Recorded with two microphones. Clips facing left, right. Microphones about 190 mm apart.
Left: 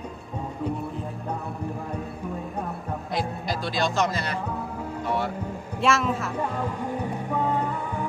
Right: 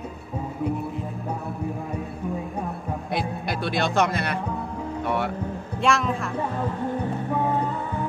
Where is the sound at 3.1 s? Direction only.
60° right (ahead or behind).